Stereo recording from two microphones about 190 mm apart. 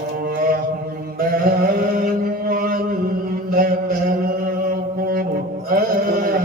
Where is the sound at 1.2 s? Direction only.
50° right (ahead or behind).